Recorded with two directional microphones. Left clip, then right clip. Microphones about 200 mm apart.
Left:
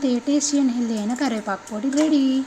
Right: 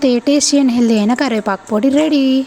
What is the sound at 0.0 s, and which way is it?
Speech, 50° right (ahead or behind).